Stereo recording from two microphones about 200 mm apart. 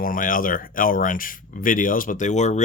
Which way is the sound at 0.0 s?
45° left (ahead or behind).